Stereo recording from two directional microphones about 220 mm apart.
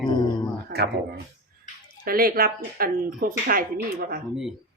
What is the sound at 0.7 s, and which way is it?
Speech, 50° right (ahead or behind).